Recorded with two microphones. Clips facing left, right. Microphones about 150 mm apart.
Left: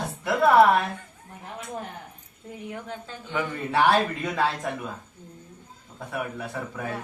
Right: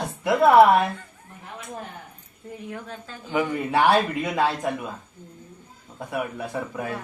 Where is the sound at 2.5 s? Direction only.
20° left (ahead or behind).